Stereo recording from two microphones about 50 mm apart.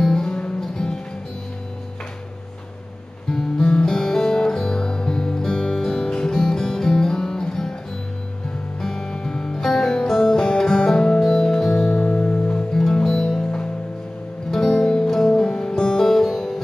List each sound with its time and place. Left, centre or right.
0.0 s music: centre
3.3 s music: centre
8.8 s music: centre
12.0 s music: left
13.0 s music: centre